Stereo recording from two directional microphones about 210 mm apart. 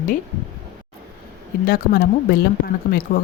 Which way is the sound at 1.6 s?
45° left (ahead or behind).